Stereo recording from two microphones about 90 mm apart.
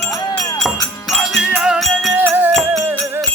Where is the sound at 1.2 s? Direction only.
5° right (ahead or behind).